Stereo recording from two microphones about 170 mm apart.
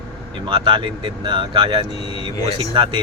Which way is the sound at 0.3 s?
30° right (ahead or behind).